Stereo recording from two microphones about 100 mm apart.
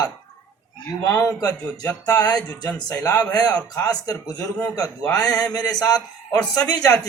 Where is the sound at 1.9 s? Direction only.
40° left (ahead or behind).